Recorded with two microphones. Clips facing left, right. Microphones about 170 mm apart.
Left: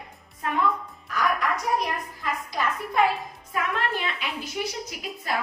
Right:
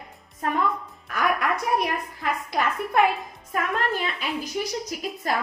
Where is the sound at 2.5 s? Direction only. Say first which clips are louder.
Right 3 dB; 60° right (ahead or behind).